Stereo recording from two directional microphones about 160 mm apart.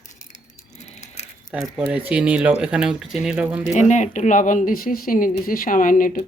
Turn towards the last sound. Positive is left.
turn(degrees=60)  # may be behind; listen again after turning